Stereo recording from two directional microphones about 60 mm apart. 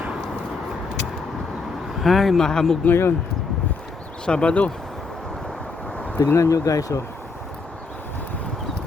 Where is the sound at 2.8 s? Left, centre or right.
Left.